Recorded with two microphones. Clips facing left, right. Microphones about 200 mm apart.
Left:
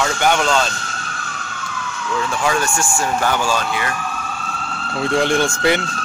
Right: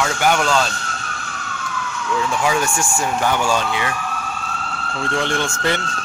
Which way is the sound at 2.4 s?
15° right (ahead or behind).